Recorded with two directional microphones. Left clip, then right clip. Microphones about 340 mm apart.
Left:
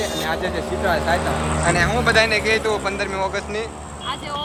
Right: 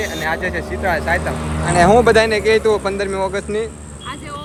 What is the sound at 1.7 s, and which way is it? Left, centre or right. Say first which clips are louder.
Speech: right 8 dB; centre.